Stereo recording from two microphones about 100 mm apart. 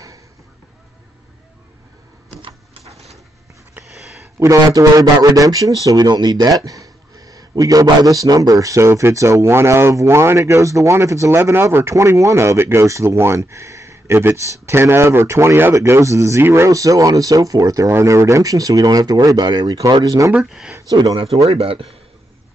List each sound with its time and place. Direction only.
4.4 s speech: 35° right (ahead or behind)
20.3 s speech: 10° right (ahead or behind)
20.9 s speech: 50° right (ahead or behind)
21.5 s speech: 70° right (ahead or behind)